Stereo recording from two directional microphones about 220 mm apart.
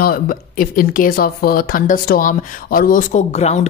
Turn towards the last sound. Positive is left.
turn(degrees=30)  # may be behind; listen again after turning